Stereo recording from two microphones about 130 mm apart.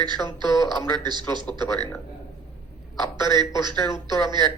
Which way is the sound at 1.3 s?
35° right (ahead or behind).